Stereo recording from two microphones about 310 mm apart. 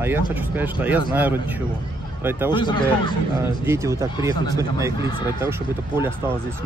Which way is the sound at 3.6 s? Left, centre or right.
Centre.